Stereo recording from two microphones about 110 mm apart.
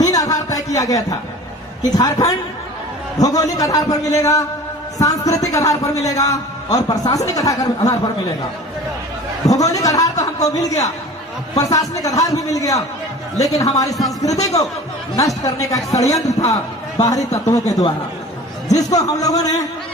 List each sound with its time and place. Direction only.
0.0 s a sound: 35° left (ahead or behind)
2.0 s a man's voice: 35° left (ahead or behind)
9.5 s a man's voice: 30° left (ahead or behind)